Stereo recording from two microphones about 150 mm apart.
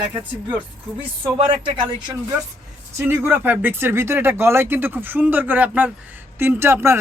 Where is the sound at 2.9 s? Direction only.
15° right (ahead or behind).